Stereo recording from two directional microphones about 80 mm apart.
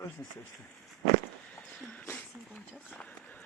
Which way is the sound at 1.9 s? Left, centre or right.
Left.